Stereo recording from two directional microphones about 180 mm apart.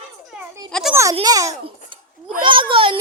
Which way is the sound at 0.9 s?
15° right (ahead or behind).